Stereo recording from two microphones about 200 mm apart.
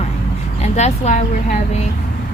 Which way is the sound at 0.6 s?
35° left (ahead or behind).